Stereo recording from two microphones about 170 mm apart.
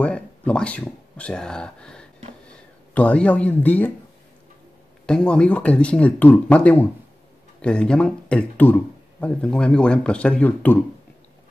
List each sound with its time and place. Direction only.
0.0 s speech: 5° left (ahead or behind)
5.0 s speech: 5° left (ahead or behind)